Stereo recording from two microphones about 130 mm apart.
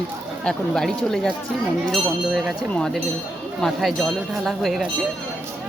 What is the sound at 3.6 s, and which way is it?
Speech, centre (ahead or behind).